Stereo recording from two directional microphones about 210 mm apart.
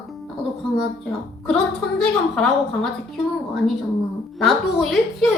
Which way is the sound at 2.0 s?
5° left (ahead or behind).